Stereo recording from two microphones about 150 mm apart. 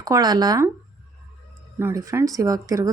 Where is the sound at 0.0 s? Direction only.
25° right (ahead or behind).